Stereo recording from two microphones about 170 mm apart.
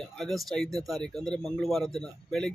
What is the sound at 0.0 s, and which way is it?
A man's voice, centre (ahead or behind).